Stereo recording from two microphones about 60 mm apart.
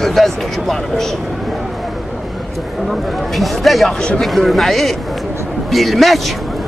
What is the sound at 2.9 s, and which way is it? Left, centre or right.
A man's voice, centre.